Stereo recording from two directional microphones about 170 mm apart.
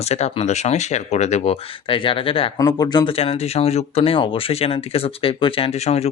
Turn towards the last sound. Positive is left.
turn(degrees=40)  # may be behind; listen again after turning